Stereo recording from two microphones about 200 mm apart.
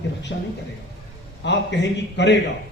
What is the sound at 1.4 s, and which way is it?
Speech, 60° left (ahead or behind).